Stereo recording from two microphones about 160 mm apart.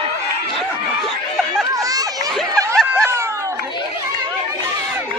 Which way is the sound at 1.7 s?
20° right (ahead or behind).